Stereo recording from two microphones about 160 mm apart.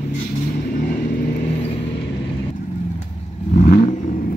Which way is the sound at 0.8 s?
65° left (ahead or behind).